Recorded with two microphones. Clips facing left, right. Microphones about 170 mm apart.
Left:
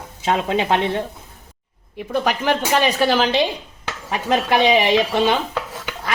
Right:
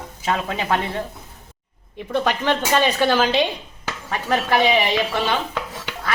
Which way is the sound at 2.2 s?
10° left (ahead or behind).